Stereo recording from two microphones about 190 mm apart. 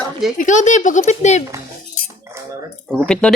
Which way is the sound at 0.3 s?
40° left (ahead or behind).